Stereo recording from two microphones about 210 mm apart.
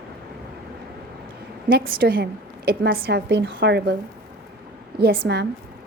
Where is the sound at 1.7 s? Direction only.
45° right (ahead or behind).